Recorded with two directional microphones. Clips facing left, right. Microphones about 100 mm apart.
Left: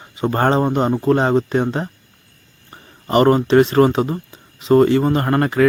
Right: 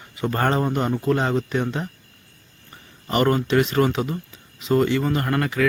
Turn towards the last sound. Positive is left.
turn(degrees=40)  # may be behind; listen again after turning